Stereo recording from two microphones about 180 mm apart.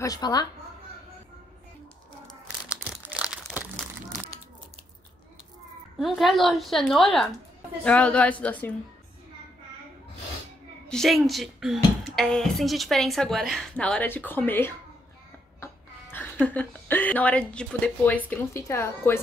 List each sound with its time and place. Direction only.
0.0 s a woman's voice: 20° left (ahead or behind)
3.0 s crumpling: 5° right (ahead or behind)
5.9 s a woman's voice: centre (ahead or behind)
10.9 s a woman's voice: centre (ahead or behind)